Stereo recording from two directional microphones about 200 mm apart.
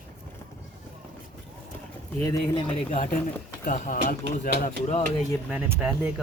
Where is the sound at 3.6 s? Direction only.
45° left (ahead or behind).